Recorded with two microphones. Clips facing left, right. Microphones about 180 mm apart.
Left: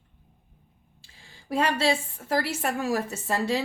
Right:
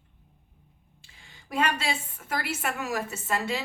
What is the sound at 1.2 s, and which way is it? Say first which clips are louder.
A woman's voice: left 2 dB; 35° left (ahead or behind).